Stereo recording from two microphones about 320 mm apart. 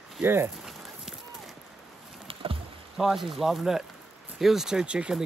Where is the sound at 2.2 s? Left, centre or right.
Centre.